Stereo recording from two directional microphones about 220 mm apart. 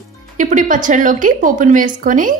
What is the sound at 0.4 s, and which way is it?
A woman's voice, 35° right (ahead or behind).